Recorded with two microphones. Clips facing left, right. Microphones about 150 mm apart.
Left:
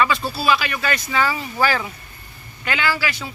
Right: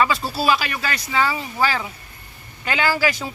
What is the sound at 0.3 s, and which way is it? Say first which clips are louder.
Speech: even; 40° right (ahead or behind).